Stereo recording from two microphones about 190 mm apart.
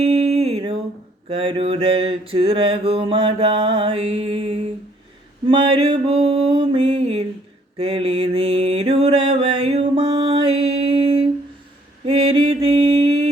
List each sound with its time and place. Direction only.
0.1 s music: 30° right (ahead or behind)
1.3 s mantra: 30° right (ahead or behind)